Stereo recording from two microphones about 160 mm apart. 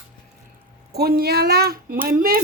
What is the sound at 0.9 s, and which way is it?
Speech, 75° right (ahead or behind).